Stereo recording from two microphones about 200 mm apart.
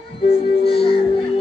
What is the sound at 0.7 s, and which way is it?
Music, 30° left (ahead or behind).